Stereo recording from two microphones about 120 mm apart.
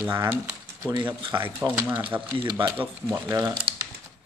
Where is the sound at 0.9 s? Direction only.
40° right (ahead or behind).